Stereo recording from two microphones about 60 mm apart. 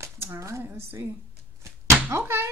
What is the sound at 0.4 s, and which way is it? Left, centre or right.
Speech, right.